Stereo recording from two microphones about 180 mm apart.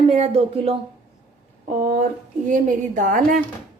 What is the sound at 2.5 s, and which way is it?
Speech, 50° right (ahead or behind).